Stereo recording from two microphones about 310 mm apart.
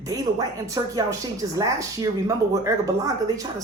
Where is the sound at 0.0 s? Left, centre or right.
Centre.